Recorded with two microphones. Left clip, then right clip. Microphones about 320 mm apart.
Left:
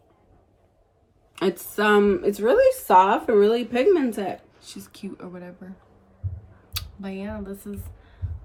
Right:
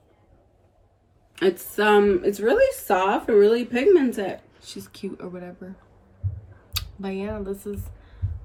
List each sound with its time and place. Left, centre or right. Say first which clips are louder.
1.4 s speech: right 2 dB; centre
4.6 s speech: right 4 dB; centre
6.7 s speech: right 4 dB; centre